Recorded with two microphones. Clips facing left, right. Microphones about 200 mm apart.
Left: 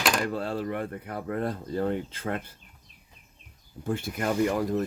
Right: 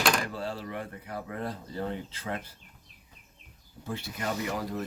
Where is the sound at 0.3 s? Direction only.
55° left (ahead or behind).